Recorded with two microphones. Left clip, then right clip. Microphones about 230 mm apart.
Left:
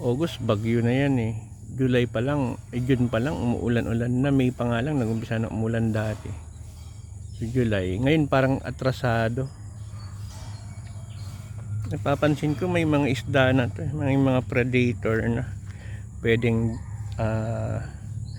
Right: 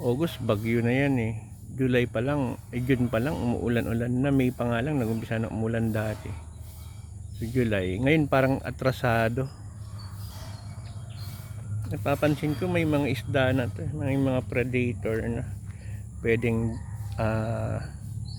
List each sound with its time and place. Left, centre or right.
0.0 s speech: centre
7.4 s speech: centre
11.9 s speech: centre
17.2 s speech: centre